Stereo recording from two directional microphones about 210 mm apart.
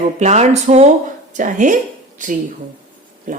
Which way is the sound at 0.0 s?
30° right (ahead or behind).